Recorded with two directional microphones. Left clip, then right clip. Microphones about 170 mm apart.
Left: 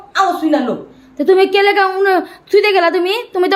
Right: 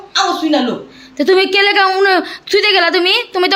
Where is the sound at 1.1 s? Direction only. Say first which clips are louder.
Even; 10° right (ahead or behind).